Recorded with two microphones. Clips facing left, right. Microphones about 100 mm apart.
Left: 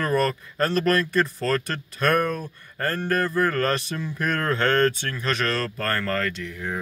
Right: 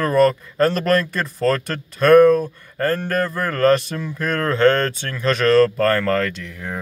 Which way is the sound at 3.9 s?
60° right (ahead or behind).